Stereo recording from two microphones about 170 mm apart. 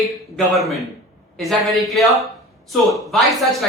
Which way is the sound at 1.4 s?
Centre (ahead or behind).